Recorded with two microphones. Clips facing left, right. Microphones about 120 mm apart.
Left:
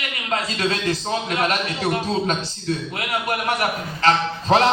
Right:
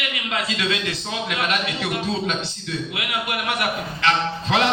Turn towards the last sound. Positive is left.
turn(degrees=40)  # may be behind; listen again after turning